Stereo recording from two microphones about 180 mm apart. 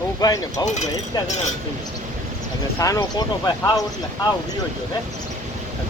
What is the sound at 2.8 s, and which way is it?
Speech, 20° left (ahead or behind).